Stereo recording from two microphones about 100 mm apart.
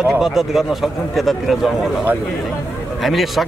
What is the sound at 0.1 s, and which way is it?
Speech, 5° right (ahead or behind).